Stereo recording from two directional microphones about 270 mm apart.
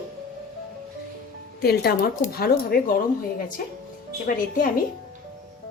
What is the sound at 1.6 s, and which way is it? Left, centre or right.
A woman's voice, left.